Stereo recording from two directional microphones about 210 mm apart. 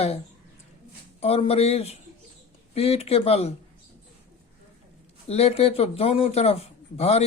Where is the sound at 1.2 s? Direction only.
30° left (ahead or behind).